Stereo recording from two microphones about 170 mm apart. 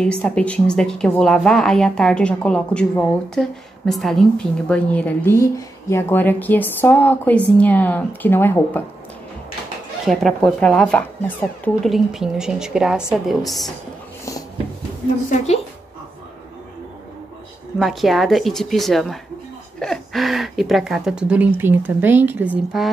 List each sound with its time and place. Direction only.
0.0 s speech: 5° left (ahead or behind)
10.0 s speech: centre (ahead or behind)
11.9 s speech: 5° right (ahead or behind)
15.2 s a woman's voice: 40° left (ahead or behind)
17.7 s speech: centre (ahead or behind)